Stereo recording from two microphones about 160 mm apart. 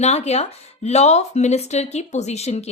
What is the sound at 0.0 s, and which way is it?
A woman's voice, 45° left (ahead or behind).